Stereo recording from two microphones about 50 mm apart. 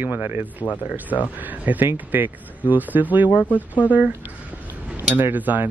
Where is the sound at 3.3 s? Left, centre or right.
Left.